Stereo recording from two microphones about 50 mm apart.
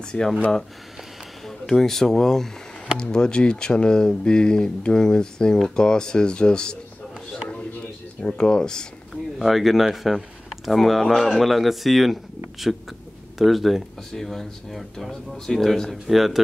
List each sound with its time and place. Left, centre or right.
0.0 s speech: centre
1.4 s speech: centre
8.2 s speech: centre
9.1 s speech: centre
13.4 s speech: centre